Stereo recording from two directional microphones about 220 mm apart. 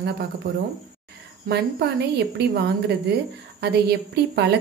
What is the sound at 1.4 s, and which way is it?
A woman's voice, 50° right (ahead or behind).